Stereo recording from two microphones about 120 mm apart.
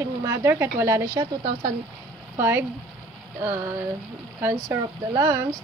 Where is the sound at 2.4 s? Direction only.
20° right (ahead or behind).